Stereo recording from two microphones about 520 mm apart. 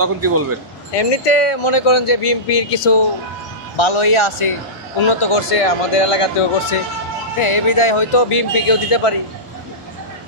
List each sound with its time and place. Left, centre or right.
0.0 s speech: right
0.9 s speech: left
3.7 s speech: left
7.3 s speech: left